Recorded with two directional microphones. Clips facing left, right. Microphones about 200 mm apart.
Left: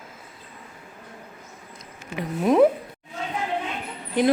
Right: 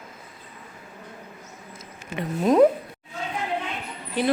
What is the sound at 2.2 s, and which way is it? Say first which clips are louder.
Speech: even; centre (ahead or behind).